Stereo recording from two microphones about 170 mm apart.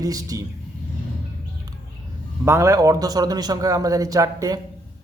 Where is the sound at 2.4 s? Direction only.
15° right (ahead or behind).